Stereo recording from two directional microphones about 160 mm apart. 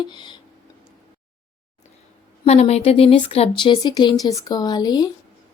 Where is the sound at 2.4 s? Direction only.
40° left (ahead or behind); by 5.1 s 25° left (ahead or behind).